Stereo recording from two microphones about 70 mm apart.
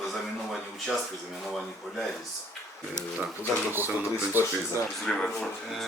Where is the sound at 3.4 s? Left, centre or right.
Right.